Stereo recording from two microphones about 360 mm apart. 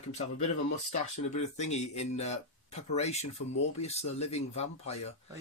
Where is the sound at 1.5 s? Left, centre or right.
Centre.